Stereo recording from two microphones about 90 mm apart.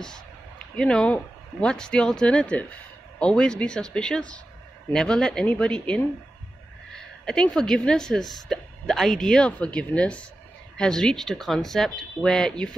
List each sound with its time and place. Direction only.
0.7 s speech: 10° left (ahead or behind)
6.9 s a sound: 5° left (ahead or behind)
7.5 s a woman's voice: 5° left (ahead or behind)